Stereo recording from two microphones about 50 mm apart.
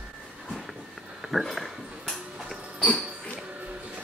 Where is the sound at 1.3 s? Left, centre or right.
Centre.